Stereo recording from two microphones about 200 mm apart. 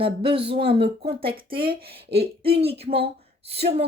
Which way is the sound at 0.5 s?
30° right (ahead or behind).